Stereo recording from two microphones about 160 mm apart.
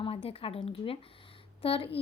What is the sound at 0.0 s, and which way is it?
A woman's voice, 35° left (ahead or behind).